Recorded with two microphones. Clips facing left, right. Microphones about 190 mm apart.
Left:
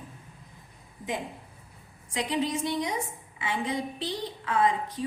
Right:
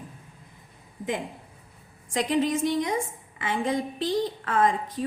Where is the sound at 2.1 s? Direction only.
50° right (ahead or behind).